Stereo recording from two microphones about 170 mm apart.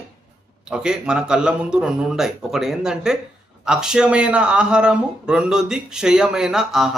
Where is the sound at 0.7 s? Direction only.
5° right (ahead or behind).